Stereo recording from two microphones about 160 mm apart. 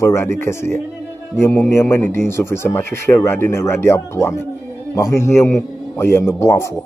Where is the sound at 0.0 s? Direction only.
15° left (ahead or behind).